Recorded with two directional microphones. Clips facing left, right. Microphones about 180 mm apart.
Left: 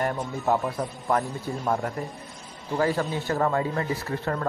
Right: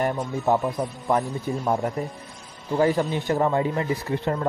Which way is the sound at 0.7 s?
15° right (ahead or behind).